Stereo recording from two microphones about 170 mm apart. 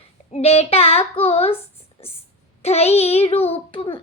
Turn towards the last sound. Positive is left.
turn(degrees=30)  # may be behind; listen again after turning